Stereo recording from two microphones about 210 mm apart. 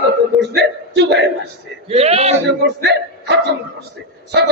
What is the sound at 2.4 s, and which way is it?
A man's voice, 55° right (ahead or behind).